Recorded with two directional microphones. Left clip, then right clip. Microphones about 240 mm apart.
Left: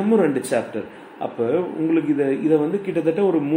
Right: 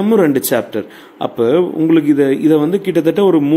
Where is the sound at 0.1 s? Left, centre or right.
Right.